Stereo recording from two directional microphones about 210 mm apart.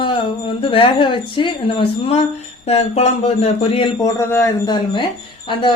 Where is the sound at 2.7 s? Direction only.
30° left (ahead or behind).